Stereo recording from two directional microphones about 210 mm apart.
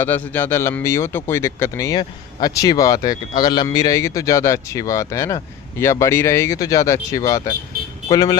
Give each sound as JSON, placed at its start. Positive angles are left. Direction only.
{"t": 0.0, "sound": "speech", "side_deg": 10}
{"t": 7.7, "sound": "vehicle", "side_deg": -45}
{"t": 8.1, "sound": "speech", "side_deg": 20}